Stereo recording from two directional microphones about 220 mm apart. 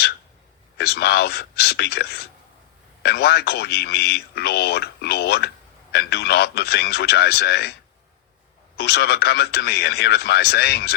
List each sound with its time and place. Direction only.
0.8 s a man's voice: 45° left (ahead or behind)
8.8 s a man's voice: 45° left (ahead or behind)